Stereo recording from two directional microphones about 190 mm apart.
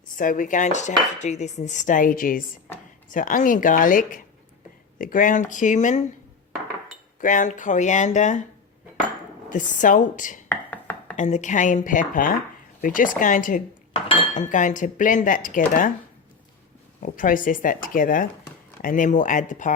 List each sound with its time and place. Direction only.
0.2 s speech: 45° left (ahead or behind)
7.2 s speech: 45° left (ahead or behind)
9.5 s speech: 45° left (ahead or behind)
10.5 s a sound: 10° left (ahead or behind)
11.2 s speech: 40° left (ahead or behind)
17.2 s speech: 45° left (ahead or behind)